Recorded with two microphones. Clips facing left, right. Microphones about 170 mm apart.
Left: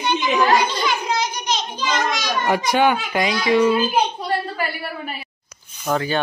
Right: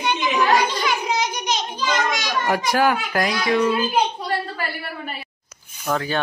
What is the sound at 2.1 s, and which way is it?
A child's voice, centre (ahead or behind).